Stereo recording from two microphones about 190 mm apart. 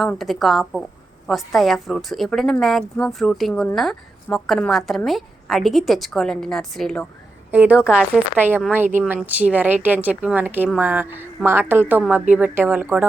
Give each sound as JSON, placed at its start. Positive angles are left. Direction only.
{"t": 0.0, "sound": "a woman's voice", "side_deg": 0}
{"t": 7.5, "sound": "a woman's voice", "side_deg": -10}